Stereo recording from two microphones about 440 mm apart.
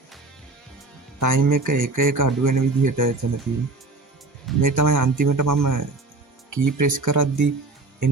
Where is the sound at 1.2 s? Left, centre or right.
Right.